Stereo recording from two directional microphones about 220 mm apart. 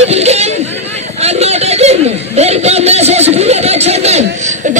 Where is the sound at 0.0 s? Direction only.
30° right (ahead or behind).